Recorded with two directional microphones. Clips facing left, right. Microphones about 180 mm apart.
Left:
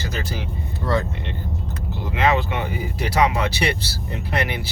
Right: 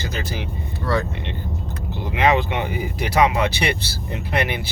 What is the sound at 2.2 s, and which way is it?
Speech, 20° right (ahead or behind).